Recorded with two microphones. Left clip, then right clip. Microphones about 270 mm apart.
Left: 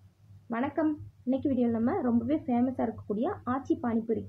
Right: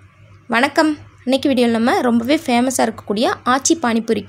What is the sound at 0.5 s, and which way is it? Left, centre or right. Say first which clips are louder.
A woman's voice: right 15 dB; right.